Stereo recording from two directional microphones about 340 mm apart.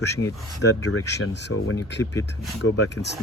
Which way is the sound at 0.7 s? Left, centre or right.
Left.